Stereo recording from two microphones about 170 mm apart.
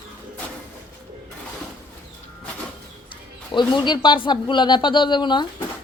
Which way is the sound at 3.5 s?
25° left (ahead or behind).